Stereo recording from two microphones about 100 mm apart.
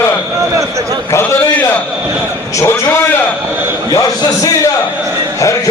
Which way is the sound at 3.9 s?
40° left (ahead or behind).